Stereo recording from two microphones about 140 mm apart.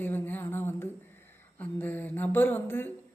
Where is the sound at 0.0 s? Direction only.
15° left (ahead or behind).